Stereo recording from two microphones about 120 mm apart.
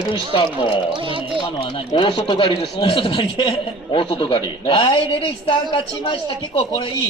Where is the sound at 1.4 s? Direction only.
45° left (ahead or behind).